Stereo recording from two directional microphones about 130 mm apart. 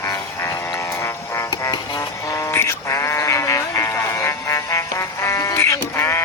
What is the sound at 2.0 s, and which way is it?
Vehicle, 25° left (ahead or behind).